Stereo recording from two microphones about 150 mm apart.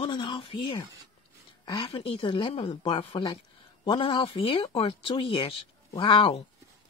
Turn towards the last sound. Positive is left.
turn(degrees=35)  # may be behind; listen again after turning